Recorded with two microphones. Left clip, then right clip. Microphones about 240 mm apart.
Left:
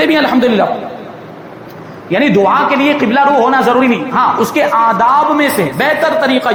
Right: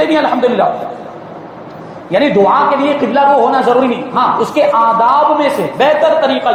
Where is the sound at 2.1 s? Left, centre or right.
Left.